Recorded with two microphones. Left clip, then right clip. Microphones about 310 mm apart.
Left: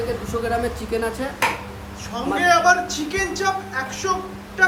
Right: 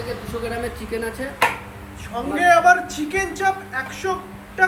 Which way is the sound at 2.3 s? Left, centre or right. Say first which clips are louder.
Right 2 dB; centre.